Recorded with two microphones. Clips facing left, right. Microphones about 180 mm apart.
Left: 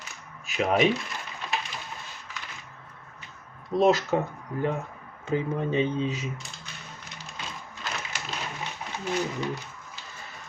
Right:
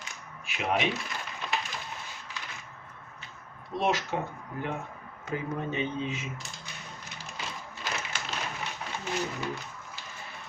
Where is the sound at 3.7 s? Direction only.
40° left (ahead or behind).